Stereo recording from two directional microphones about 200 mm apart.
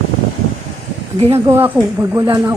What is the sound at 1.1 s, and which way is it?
Speech, 30° right (ahead or behind).